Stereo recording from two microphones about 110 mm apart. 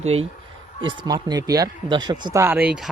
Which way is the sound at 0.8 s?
45° right (ahead or behind).